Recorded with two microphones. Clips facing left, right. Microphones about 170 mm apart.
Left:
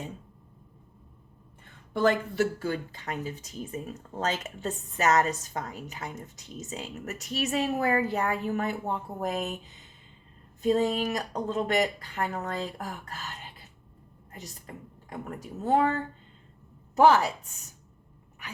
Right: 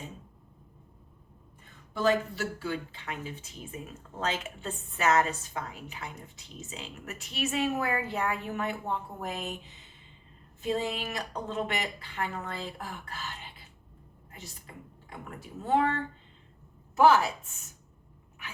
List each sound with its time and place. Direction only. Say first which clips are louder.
1.9 s speech: left 2 dB; 60° left (ahead or behind); by 9.6 s 40° left (ahead or behind)
10.6 s speech: left 6 dB; 40° left (ahead or behind)
15.1 s speech: left 5 dB; 40° left (ahead or behind)